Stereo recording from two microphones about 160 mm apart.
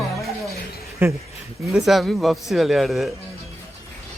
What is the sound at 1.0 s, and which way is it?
Speech, 10° right (ahead or behind).